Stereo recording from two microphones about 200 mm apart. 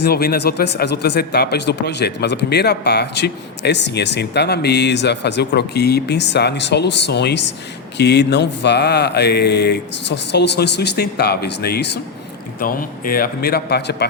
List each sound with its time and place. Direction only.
0.0 s a man's voice: 50° left (ahead or behind)